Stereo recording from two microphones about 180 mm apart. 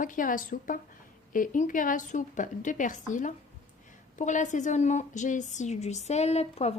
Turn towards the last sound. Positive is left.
turn(degrees=35)  # may be behind; listen again after turning